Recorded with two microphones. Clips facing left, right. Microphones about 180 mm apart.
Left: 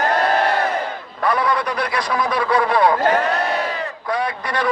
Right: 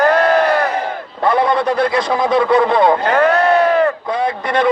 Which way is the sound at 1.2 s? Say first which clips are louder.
Right 5 dB; 25° right (ahead or behind).